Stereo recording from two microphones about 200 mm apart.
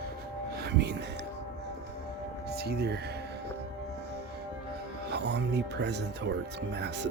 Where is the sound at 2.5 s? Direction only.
55° right (ahead or behind).